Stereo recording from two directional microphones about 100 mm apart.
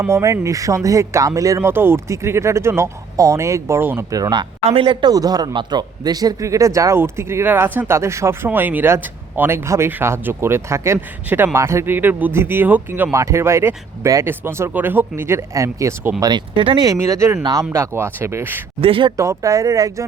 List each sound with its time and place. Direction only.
0.0 s speech: 30° right (ahead or behind)
4.1 s speech: 40° right (ahead or behind)
4.6 s speech: 65° right (ahead or behind); by 16.1 s 30° right (ahead or behind)
16.2 s speech: 50° right (ahead or behind)
16.8 s speech: 35° right (ahead or behind)
18.8 s speech: 65° right (ahead or behind)
19.1 s speech: 30° right (ahead or behind)